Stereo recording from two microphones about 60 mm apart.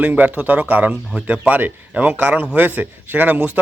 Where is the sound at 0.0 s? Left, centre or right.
Right.